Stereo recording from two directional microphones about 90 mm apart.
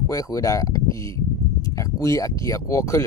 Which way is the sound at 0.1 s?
40° left (ahead or behind).